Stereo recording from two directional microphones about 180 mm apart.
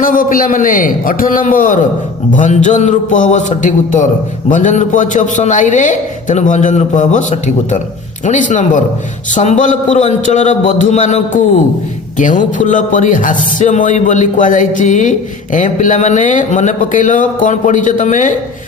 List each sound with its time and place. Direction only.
0.0 s a man's voice: 50° left (ahead or behind)